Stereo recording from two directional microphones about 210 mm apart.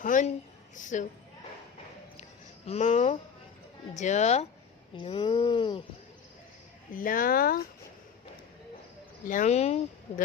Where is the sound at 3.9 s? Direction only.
35° left (ahead or behind).